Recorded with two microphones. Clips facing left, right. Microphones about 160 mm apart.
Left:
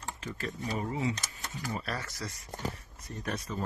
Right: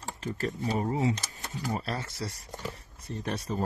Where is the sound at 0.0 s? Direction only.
40° right (ahead or behind).